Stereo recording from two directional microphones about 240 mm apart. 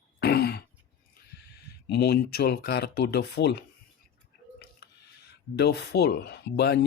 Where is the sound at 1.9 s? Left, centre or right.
Left.